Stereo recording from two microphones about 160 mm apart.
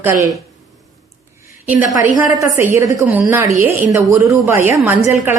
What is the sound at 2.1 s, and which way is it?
Speech, 20° right (ahead or behind).